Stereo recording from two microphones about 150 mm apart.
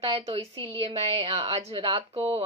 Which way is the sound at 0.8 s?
45° right (ahead or behind).